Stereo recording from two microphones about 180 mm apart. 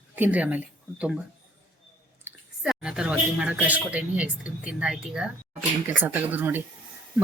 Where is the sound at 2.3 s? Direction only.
10° right (ahead or behind).